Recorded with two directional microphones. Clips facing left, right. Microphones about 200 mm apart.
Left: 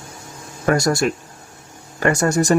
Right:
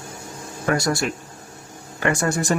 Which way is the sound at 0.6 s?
45° left (ahead or behind).